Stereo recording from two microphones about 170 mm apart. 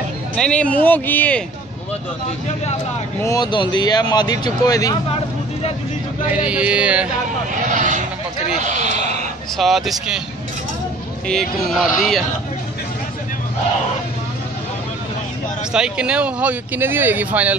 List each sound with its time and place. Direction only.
0.4 s a man's voice: 5° left (ahead or behind)
3.3 s speech: 25° left (ahead or behind)
6.3 s speech: 5° right (ahead or behind)
7.7 s speech: 45° right (ahead or behind)
8.6 s a sound: 45° right (ahead or behind)
9.6 s a man's voice: centre (ahead or behind)
11.2 s a man's voice: centre (ahead or behind)
15.7 s speech: 5° right (ahead or behind)